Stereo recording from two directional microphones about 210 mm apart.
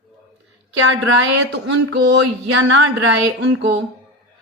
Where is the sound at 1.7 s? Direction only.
60° right (ahead or behind).